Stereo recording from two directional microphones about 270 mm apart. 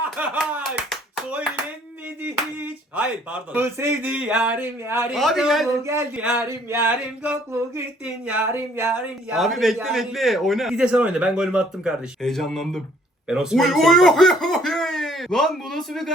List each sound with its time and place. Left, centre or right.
0.0 s clapping: centre
2.2 s speech: centre